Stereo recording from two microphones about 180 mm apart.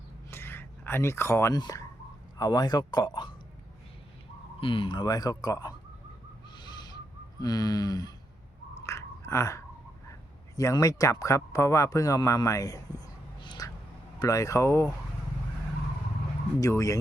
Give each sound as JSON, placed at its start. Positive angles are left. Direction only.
{"t": 0.3, "sound": "a sound", "side_deg": 15}
{"t": 2.4, "sound": "speech", "side_deg": 20}
{"t": 4.6, "sound": "speech", "side_deg": 30}
{"t": 6.6, "sound": "owl", "side_deg": 25}
{"t": 7.4, "sound": "speech", "side_deg": 20}
{"t": 8.9, "sound": "a sound", "side_deg": 15}
{"t": 10.1, "sound": "speech", "side_deg": 20}
{"t": 16.6, "sound": "speech", "side_deg": 20}